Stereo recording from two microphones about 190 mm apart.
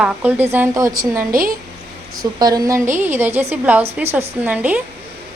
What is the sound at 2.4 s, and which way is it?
Speech, 20° right (ahead or behind).